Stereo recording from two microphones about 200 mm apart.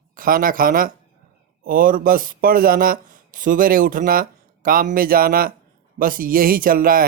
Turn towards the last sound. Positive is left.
turn(degrees=-45)  # may be behind; listen again after turning